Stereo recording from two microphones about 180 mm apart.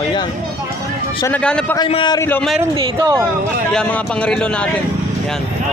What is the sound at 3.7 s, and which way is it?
Speech, 5° left (ahead or behind).